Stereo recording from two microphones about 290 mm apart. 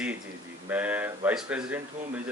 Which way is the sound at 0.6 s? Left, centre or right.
Centre.